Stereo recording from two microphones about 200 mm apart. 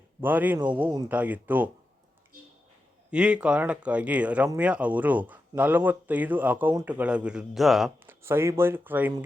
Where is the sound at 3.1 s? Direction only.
5° right (ahead or behind).